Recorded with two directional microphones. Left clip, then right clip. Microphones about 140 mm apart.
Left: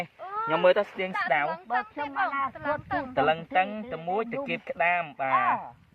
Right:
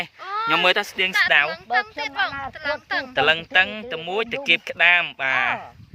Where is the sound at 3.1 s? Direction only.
35° right (ahead or behind).